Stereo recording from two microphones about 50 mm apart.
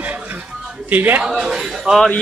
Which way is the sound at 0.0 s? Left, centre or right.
Right.